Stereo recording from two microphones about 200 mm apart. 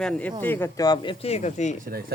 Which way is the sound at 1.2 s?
35° left (ahead or behind).